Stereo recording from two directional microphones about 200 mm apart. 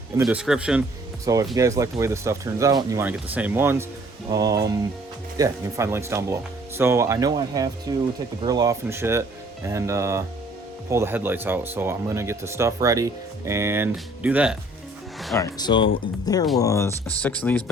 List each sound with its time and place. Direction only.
0.2 s speech: 5° right (ahead or behind)
1.2 s speech: 15° right (ahead or behind)
15.4 s speech: 15° left (ahead or behind)